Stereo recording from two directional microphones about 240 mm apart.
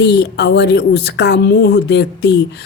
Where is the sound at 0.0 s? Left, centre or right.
Left.